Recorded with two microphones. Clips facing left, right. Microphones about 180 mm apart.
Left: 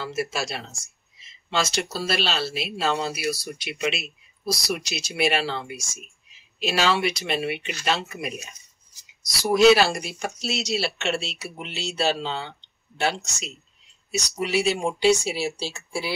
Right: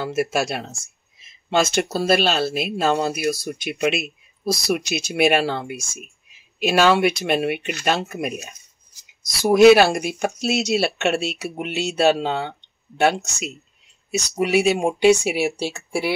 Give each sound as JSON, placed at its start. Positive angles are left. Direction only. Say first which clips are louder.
{"t": 0.0, "sound": "speech", "louder": "right 6 dB", "side_deg": -55}